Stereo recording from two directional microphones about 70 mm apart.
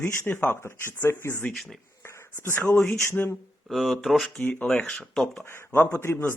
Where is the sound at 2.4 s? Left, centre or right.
Left.